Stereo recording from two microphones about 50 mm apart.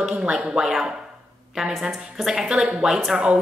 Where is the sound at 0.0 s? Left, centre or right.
Centre.